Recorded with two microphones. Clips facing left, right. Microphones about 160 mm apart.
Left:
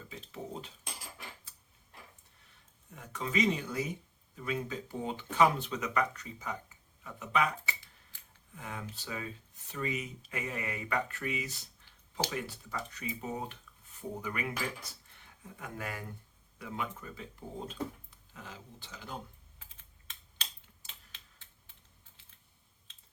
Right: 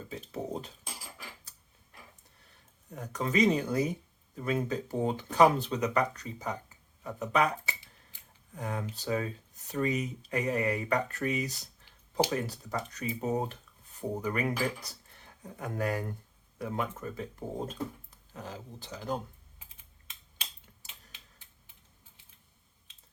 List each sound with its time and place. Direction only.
0.1 s cutlery: 40° right (ahead or behind)
2.9 s speech: 40° right (ahead or behind)